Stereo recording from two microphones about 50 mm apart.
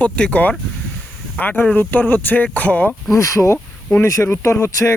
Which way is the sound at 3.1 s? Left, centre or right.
Left.